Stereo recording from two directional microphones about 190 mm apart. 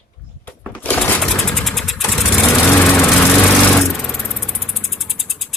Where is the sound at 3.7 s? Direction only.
5° left (ahead or behind).